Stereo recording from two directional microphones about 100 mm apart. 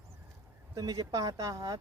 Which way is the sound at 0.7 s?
40° right (ahead or behind).